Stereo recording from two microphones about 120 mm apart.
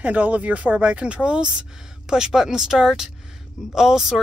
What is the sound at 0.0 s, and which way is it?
Speech, 10° right (ahead or behind).